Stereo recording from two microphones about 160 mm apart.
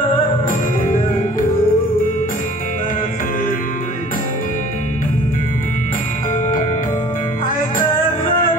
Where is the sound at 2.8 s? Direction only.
60° left (ahead or behind).